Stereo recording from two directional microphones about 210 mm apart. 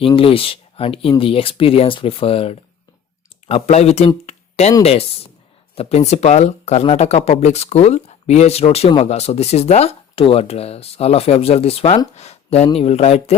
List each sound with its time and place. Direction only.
0.0 s speech: 25° left (ahead or behind)